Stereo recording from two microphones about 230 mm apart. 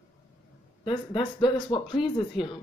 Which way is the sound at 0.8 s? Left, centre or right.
Left.